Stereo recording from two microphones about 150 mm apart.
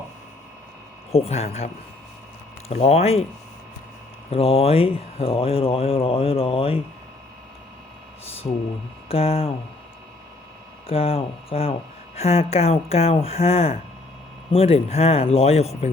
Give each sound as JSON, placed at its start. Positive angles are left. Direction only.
{"t": 1.1, "sound": "speech", "side_deg": 45}
{"t": 4.3, "sound": "speech", "side_deg": 40}
{"t": 8.2, "sound": "a sound", "side_deg": 40}
{"t": 9.0, "sound": "speech", "side_deg": 40}
{"t": 10.8, "sound": "speech", "side_deg": 40}